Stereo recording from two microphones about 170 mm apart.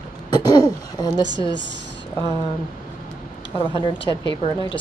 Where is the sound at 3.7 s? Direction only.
30° left (ahead or behind).